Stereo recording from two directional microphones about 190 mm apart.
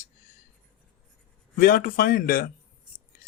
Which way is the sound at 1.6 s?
45° left (ahead or behind).